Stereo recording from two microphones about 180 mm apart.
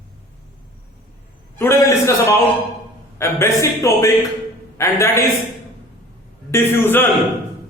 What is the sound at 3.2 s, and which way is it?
A man's voice, 15° left (ahead or behind).